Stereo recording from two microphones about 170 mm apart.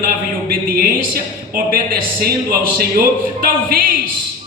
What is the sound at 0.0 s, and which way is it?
A man's voice, 60° right (ahead or behind).